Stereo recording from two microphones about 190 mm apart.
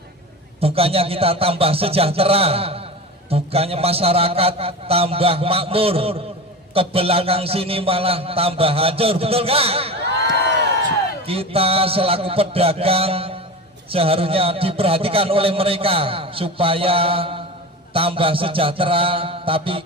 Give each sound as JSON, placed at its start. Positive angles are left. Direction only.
{"t": 0.6, "sound": "a man's voice", "side_deg": -30}
{"t": 11.3, "sound": "a man's voice", "side_deg": -30}